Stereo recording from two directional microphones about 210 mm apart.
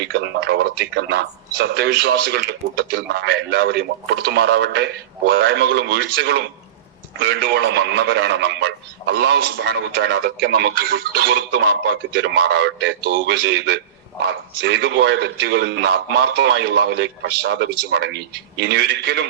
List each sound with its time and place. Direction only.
0.0 s a man's voice: 55° right (ahead or behind)